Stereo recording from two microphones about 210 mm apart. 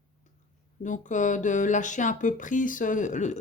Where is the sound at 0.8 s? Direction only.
35° left (ahead or behind).